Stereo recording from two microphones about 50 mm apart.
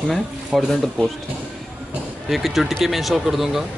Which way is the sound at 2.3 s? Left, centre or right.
Centre.